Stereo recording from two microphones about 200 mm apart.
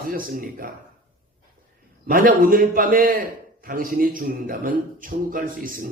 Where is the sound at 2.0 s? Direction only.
45° right (ahead or behind).